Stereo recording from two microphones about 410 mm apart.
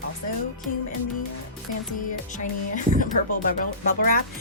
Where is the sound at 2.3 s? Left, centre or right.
Centre.